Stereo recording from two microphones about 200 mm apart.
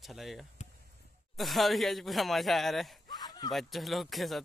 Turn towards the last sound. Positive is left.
turn(degrees=0)  # may be behind; listen again after turning